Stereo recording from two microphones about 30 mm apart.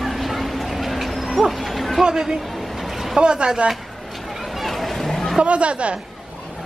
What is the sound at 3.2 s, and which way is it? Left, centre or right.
Speech, right.